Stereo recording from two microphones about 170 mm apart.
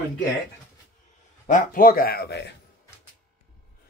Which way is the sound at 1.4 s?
55° left (ahead or behind).